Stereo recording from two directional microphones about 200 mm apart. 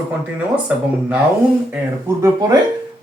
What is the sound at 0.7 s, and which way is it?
Speech, 5° right (ahead or behind).